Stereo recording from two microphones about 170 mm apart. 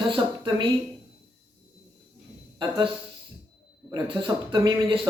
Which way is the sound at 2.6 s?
30° right (ahead or behind).